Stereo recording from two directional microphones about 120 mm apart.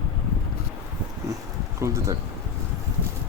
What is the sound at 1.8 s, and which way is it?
Speech, 25° right (ahead or behind).